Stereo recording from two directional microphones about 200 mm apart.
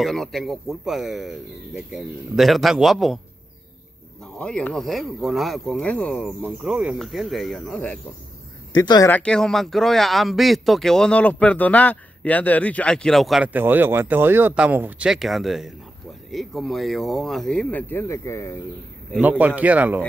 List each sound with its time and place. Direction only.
0.0 s speech: centre (ahead or behind)
4.2 s speech: 5° left (ahead or behind)
8.7 s speech: 20° left (ahead or behind)
9.1 s speech: 5° left (ahead or behind)
19.2 s speech: 10° right (ahead or behind)